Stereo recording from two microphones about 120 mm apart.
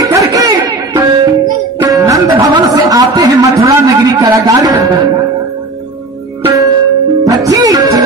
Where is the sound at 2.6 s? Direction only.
30° right (ahead or behind).